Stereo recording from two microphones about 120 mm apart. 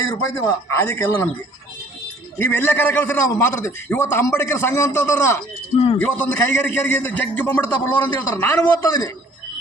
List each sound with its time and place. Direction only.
0.1 s a man's voice: 30° left (ahead or behind)
2.4 s a man's voice: 15° left (ahead or behind)
5.7 s a man's voice: 50° left (ahead or behind)
6.0 s a man's voice: 10° left (ahead or behind)
8.8 s a man's voice: 35° left (ahead or behind)